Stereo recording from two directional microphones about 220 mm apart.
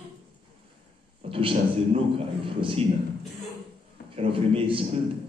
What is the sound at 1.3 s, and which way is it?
A man's voice, 25° right (ahead or behind).